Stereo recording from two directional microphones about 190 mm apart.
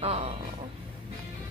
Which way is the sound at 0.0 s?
35° right (ahead or behind).